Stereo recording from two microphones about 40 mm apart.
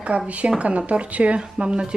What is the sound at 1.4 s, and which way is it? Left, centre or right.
Speech, right.